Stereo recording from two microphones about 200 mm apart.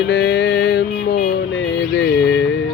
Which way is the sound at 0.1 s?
55° left (ahead or behind).